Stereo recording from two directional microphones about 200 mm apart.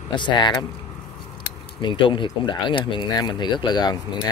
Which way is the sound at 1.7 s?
25° left (ahead or behind).